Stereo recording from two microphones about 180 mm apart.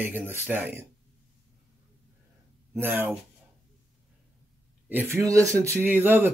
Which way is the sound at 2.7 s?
10° right (ahead or behind).